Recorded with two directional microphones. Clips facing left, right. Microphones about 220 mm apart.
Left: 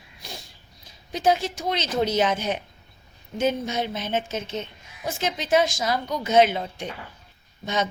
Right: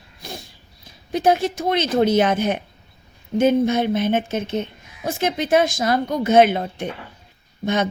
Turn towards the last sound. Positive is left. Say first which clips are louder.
# right 5 dB
turn(degrees=-55)  # may be behind; listen again after turning